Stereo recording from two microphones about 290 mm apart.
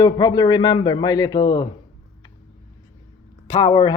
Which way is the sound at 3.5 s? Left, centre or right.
Centre.